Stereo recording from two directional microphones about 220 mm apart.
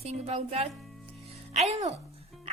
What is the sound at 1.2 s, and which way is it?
Music, 30° right (ahead or behind).